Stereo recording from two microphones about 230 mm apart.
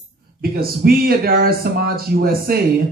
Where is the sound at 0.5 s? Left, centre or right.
Right.